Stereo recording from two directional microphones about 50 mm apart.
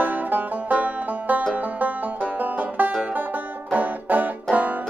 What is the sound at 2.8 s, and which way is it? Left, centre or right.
Music, right.